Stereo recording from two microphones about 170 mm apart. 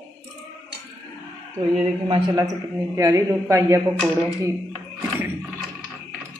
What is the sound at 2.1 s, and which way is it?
A woman's voice, 20° right (ahead or behind).